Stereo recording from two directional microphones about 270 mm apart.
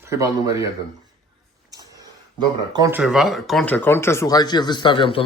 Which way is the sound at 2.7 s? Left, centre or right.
Centre.